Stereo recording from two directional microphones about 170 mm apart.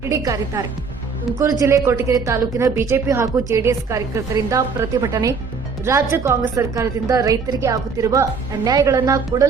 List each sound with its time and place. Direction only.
0.1 s a woman's voice: 20° right (ahead or behind)